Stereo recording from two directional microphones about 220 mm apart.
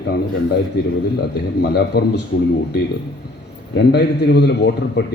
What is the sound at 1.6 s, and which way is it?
Speech, 45° left (ahead or behind).